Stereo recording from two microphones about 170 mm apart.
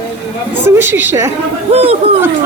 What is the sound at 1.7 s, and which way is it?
Speech, 35° right (ahead or behind).